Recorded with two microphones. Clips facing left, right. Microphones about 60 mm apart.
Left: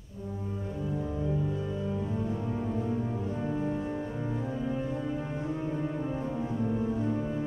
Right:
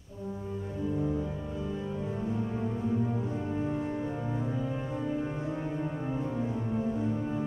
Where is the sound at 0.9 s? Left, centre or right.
Centre.